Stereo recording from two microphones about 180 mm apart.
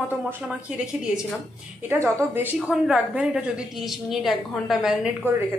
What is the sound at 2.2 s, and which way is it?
A woman's voice, 10° right (ahead or behind).